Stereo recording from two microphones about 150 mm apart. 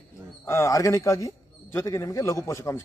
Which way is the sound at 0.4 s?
20° left (ahead or behind).